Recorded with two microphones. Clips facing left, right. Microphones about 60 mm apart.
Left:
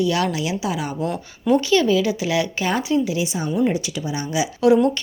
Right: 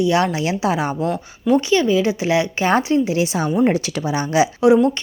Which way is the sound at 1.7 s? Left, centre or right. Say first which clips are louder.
Right 1 dB; right.